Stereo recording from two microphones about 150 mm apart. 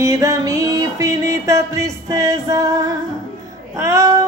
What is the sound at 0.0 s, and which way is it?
Music, 20° right (ahead or behind).